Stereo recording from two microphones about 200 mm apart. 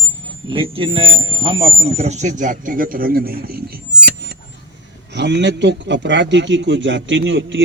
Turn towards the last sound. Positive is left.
turn(degrees=-65)  # may be behind; listen again after turning